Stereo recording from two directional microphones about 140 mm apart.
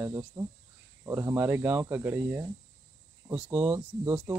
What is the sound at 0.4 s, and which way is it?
Speech, 20° right (ahead or behind).